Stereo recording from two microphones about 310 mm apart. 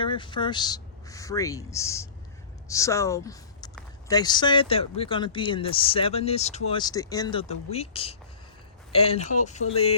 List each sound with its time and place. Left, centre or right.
0.0 s speech: centre